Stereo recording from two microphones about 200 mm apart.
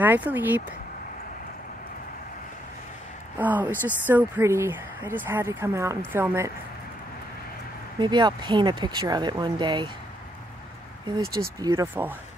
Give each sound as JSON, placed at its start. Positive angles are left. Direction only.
{"t": 0.0, "sound": "a woman's voice", "side_deg": -10}
{"t": 3.3, "sound": "a woman's voice", "side_deg": -10}
{"t": 8.0, "sound": "speech", "side_deg": -20}
{"t": 11.1, "sound": "a woman's voice", "side_deg": -15}